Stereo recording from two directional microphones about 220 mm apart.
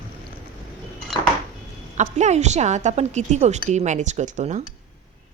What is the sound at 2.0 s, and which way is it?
A woman's voice, 30° right (ahead or behind).